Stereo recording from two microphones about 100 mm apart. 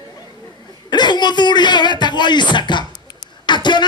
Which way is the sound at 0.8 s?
45° left (ahead or behind).